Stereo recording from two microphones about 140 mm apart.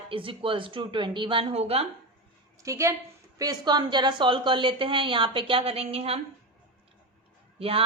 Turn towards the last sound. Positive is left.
turn(degrees=-40)  # may be behind; listen again after turning